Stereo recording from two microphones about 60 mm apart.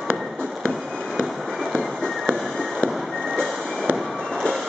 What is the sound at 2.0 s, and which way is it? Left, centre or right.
Vehicle, centre.